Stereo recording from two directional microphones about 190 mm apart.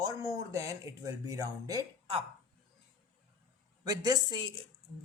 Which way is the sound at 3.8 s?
20° right (ahead or behind).